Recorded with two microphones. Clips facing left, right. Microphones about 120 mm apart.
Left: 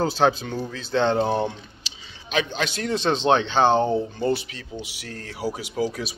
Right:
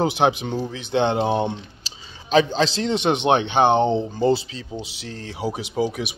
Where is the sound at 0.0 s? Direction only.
15° right (ahead or behind).